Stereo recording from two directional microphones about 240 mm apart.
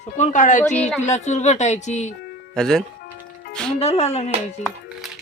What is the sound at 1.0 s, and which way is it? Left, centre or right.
A woman's voice, left.